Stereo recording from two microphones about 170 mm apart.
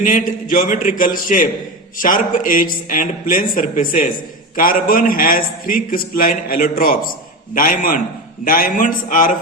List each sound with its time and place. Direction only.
0.0 s a man's voice: 50° left (ahead or behind)